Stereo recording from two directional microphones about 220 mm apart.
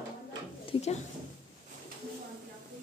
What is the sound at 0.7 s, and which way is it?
Speech, 25° left (ahead or behind).